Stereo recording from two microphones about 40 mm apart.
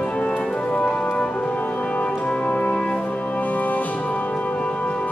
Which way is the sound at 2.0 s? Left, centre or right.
Left.